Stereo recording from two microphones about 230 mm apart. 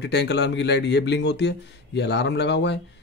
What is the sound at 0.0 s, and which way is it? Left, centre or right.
Speech, left.